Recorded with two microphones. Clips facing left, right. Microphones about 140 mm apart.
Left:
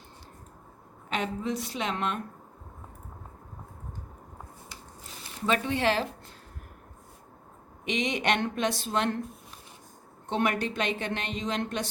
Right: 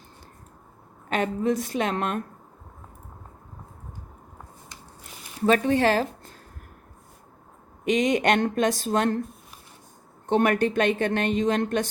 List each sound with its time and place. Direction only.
1.1 s speech: 50° right (ahead or behind)
5.5 s speech: 45° right (ahead or behind)
7.9 s speech: 45° right (ahead or behind)
10.2 s speech: 50° right (ahead or behind)